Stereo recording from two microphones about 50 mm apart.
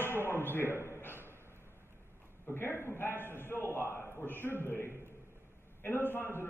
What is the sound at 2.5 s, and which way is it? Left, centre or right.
A man's voice, left.